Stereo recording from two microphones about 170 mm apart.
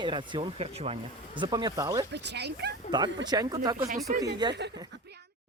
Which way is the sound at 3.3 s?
20° right (ahead or behind).